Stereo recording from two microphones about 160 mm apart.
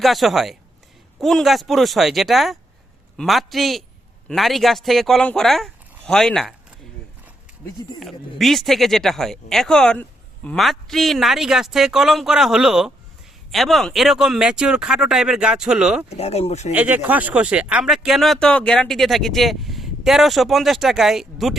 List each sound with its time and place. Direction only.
0.0 s speech: centre (ahead or behind)
7.9 s speech: centre (ahead or behind)
16.0 s speech: 40° left (ahead or behind)
16.7 s speech: 10° right (ahead or behind)